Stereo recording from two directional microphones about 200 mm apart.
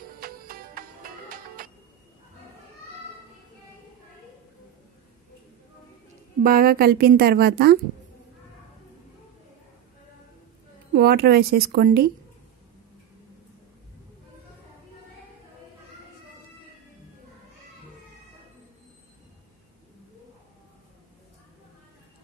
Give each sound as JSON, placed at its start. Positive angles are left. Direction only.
{"t": 0.2, "sound": "music", "side_deg": -45}
{"t": 6.4, "sound": "a woman's voice", "side_deg": -45}
{"t": 11.0, "sound": "a woman's voice", "side_deg": -50}